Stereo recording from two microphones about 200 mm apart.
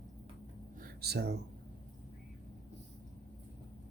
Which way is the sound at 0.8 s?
50° right (ahead or behind).